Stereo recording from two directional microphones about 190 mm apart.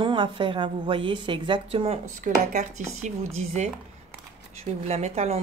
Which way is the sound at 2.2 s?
45° right (ahead or behind).